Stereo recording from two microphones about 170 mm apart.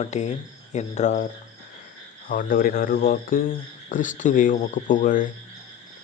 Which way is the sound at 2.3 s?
55° left (ahead or behind).